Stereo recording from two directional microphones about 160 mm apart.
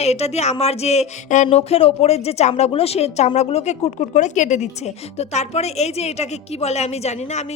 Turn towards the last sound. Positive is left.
turn(degrees=45)  # may be behind; listen again after turning